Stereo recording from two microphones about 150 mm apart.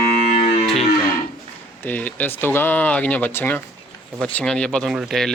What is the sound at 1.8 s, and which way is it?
Speech, 10° left (ahead or behind).